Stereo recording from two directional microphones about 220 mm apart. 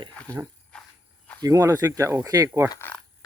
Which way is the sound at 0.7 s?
5° left (ahead or behind).